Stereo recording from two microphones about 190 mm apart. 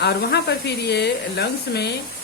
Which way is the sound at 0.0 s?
60° left (ahead or behind).